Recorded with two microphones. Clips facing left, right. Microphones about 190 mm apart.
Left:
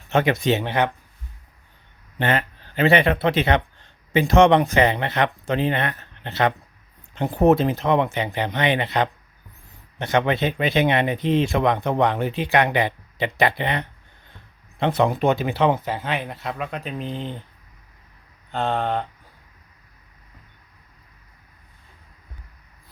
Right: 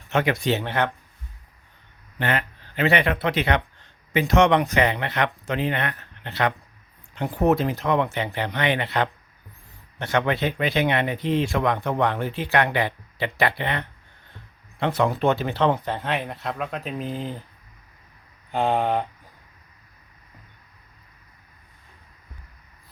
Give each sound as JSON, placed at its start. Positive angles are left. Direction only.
{"t": 0.1, "sound": "speech", "side_deg": 25}
{"t": 2.1, "sound": "speech", "side_deg": 30}
{"t": 18.5, "sound": "speech", "side_deg": -10}